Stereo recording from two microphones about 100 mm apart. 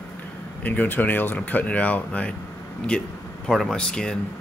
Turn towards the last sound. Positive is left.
turn(degrees=10)  # may be behind; listen again after turning